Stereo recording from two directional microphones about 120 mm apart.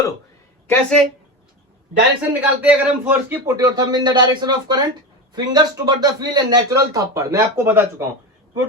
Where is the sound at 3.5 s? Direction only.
30° right (ahead or behind).